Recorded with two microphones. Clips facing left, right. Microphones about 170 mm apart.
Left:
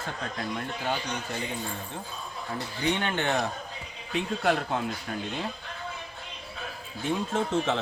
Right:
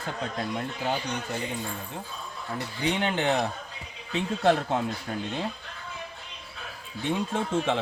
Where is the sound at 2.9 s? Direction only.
15° right (ahead or behind).